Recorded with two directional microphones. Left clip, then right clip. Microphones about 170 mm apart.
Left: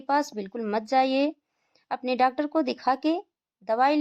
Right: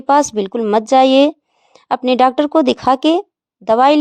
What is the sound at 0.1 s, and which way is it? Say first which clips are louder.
A woman's voice: right 13 dB; 45° right (ahead or behind).